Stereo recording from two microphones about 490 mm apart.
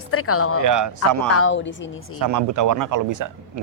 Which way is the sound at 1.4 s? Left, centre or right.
Left.